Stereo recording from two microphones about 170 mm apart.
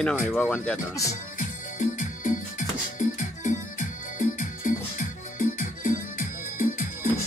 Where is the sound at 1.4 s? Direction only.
50° left (ahead or behind).